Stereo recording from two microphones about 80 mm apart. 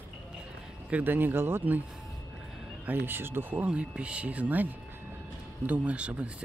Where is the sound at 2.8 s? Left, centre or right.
Right.